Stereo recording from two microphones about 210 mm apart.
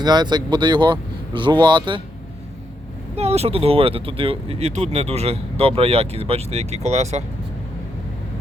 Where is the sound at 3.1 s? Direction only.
30° right (ahead or behind).